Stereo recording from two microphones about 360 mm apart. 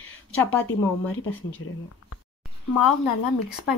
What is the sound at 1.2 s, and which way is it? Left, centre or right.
Speech, left.